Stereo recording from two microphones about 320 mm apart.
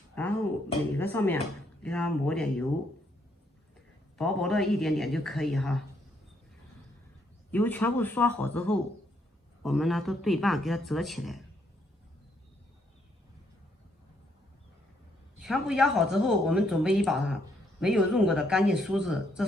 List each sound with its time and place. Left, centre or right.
0.2 s a sound: centre
0.9 s speech: centre
4.2 s speech: centre
7.5 s speech: centre
15.4 s speech: centre